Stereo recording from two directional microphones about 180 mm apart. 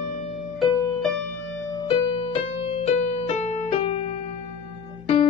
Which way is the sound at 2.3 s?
35° left (ahead or behind).